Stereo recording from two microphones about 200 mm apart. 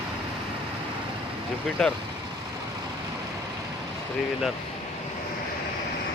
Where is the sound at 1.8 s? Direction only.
5° left (ahead or behind).